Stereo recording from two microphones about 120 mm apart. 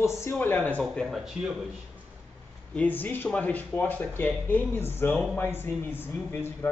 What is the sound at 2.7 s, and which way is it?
Speech, 15° left (ahead or behind).